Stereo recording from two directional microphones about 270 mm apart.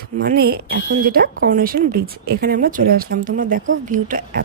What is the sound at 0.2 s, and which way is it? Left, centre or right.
A woman's voice, right.